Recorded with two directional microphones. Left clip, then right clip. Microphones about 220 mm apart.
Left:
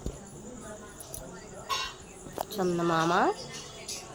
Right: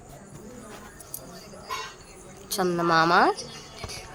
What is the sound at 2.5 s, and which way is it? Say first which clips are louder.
Speech: right 5 dB; 10° right (ahead or behind).